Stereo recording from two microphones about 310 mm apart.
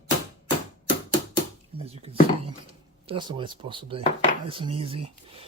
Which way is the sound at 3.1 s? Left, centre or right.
Centre.